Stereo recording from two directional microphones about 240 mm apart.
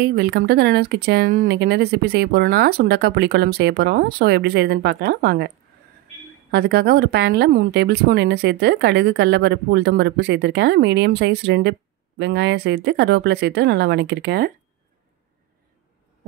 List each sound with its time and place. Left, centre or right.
0.0 s speech: right
6.5 s a woman's voice: right